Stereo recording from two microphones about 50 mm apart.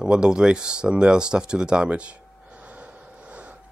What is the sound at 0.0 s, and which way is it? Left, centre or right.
Speech, centre.